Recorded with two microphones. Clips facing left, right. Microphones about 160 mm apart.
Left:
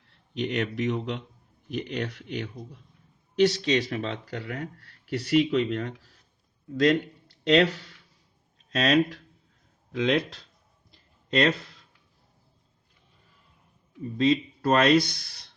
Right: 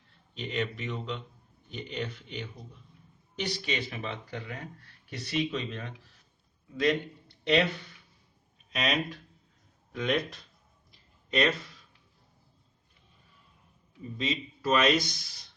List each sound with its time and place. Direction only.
0.3 s speech: 75° left (ahead or behind)
6.7 s speech: 80° left
8.7 s speech: 90° left
11.3 s speech: 65° left (ahead or behind)
14.6 s speech: 60° left (ahead or behind)